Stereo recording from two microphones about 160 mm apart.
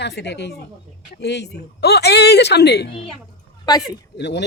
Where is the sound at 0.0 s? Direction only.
90° left.